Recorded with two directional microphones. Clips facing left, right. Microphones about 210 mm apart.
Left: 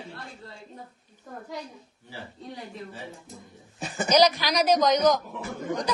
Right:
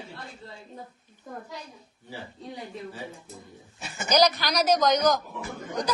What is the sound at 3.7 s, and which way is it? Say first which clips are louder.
Speech: left 7 dB; 35° left (ahead or behind).